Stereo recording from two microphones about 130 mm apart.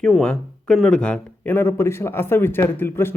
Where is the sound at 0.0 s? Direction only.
5° left (ahead or behind).